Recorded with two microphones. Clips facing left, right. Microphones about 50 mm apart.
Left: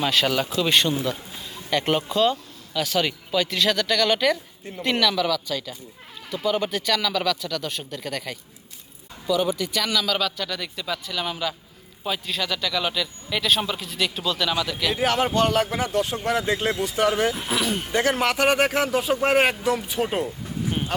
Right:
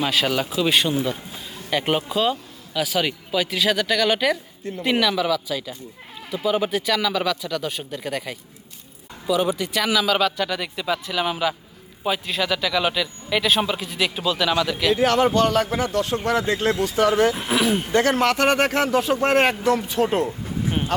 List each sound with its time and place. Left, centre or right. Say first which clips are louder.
0.0 s speech: even; centre
14.9 s speech: right 3 dB; centre
16.1 s speech: right 5 dB; right
16.5 s speech: right 3 dB; centre
17.3 s speech: right 4 dB; centre
17.9 s speech: right 2 dB; centre